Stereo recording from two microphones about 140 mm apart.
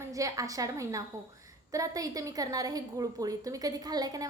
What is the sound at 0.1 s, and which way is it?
A woman's voice, 25° right (ahead or behind).